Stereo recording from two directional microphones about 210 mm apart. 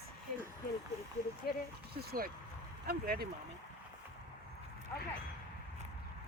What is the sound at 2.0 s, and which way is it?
Speech, 45° right (ahead or behind).